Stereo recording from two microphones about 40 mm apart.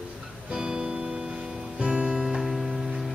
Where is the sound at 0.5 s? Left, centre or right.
Centre.